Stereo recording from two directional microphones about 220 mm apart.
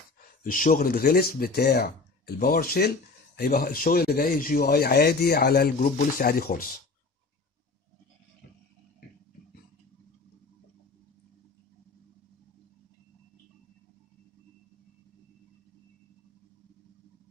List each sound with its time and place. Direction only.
0.4 s speech: 40° left (ahead or behind)